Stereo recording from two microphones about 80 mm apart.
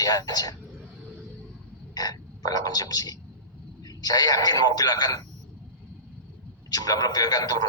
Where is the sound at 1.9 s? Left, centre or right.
Left.